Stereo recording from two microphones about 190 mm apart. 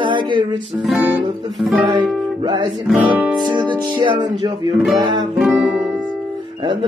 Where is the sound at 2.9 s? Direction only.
10° right (ahead or behind).